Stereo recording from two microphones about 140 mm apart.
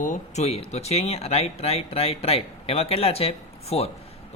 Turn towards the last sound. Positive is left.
turn(degrees=45)  # may be behind; listen again after turning